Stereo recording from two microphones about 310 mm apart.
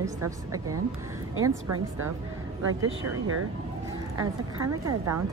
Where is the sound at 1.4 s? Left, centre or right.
Right.